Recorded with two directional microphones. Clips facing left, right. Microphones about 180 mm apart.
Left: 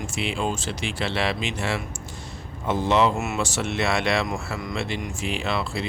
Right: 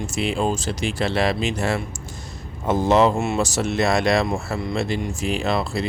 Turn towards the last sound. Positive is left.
turn(degrees=-40)  # may be behind; listen again after turning